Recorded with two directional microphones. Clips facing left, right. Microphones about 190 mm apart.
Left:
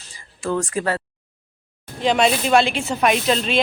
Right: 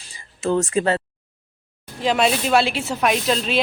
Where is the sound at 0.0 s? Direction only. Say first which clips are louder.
Right 3 dB; 25° right (ahead or behind).